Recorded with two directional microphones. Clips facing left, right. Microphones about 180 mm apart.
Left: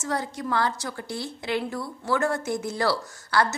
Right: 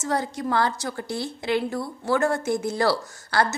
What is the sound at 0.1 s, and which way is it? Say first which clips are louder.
A woman's voice: right 3 dB; 30° right (ahead or behind).